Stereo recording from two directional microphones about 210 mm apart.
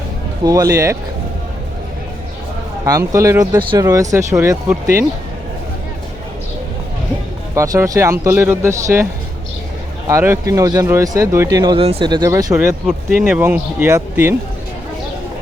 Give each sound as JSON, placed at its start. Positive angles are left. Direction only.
{"t": 0.4, "sound": "speech", "side_deg": -15}
{"t": 2.8, "sound": "speech", "side_deg": -15}
{"t": 7.5, "sound": "speech", "side_deg": -15}
{"t": 10.1, "sound": "speech", "side_deg": -10}